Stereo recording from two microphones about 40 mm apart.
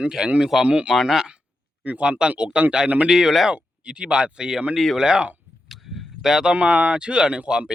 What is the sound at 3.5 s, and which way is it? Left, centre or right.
Speech, right.